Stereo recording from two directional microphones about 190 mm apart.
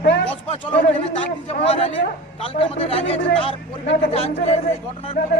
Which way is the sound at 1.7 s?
30° left (ahead or behind).